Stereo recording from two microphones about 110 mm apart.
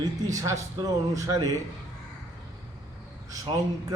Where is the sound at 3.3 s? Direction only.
30° right (ahead or behind).